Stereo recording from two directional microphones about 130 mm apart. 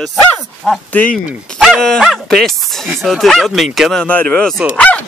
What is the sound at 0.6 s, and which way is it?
Speech, 10° left (ahead or behind).